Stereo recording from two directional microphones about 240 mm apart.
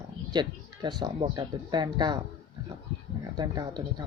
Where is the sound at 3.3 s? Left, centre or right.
Centre.